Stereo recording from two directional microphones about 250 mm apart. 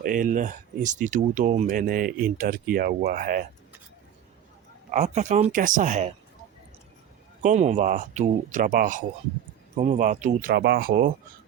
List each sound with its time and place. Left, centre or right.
0.0 s speech: right
4.9 s speech: right
7.4 s speech: right
10.5 s speech: right